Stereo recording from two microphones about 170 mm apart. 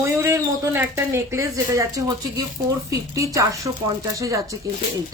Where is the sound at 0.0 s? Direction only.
15° right (ahead or behind).